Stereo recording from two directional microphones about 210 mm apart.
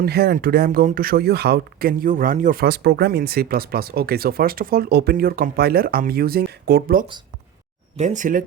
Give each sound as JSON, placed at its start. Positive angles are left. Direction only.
{"t": 0.0, "sound": "speech", "side_deg": -50}
{"t": 7.9, "sound": "speech", "side_deg": -35}